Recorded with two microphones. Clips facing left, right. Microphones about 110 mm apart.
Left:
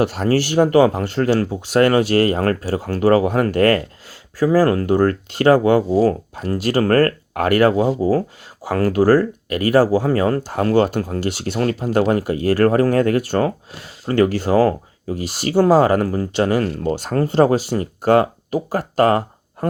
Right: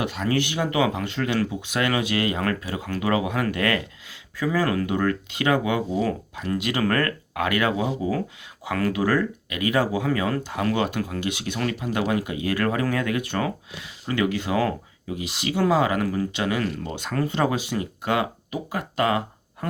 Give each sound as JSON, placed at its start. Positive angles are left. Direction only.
{"t": 0.2, "sound": "speech", "side_deg": 40}